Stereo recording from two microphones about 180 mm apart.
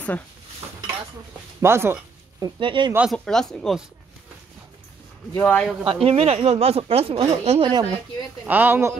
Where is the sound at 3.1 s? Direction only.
5° left (ahead or behind).